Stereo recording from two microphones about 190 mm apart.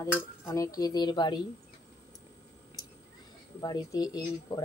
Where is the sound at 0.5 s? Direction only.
20° left (ahead or behind).